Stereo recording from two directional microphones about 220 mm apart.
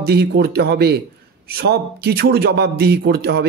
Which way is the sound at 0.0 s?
45° right (ahead or behind).